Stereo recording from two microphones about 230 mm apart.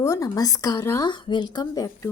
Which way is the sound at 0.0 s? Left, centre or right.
Centre.